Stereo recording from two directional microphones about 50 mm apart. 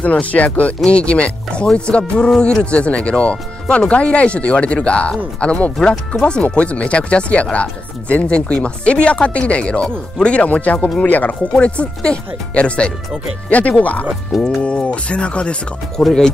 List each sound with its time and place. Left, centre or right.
0.0 s speech: left
14.3 s speech: centre
14.6 s speech: left